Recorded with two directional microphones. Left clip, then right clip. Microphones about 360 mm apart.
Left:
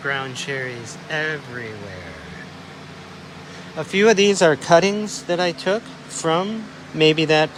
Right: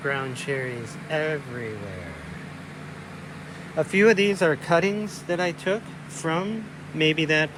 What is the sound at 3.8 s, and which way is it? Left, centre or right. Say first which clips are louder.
Speech: left 3 dB; centre.